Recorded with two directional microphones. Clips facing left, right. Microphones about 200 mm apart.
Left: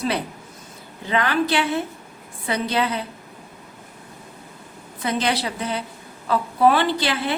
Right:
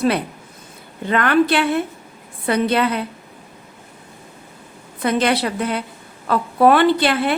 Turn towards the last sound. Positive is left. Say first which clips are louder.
# right 6 dB
turn(degrees=-55)  # may be behind; listen again after turning